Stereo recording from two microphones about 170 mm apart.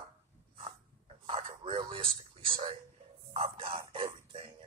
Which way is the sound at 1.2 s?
30° right (ahead or behind).